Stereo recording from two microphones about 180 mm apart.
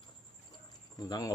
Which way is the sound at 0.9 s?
20° left (ahead or behind).